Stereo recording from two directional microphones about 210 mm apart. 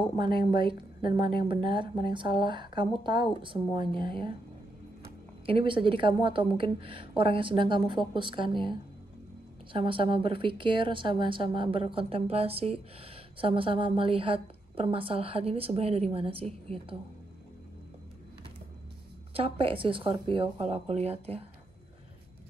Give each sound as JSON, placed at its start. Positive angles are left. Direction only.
{"t": 0.2, "sound": "a woman's voice", "side_deg": -25}
{"t": 5.5, "sound": "a woman's voice", "side_deg": -25}
{"t": 19.3, "sound": "a woman's voice", "side_deg": -25}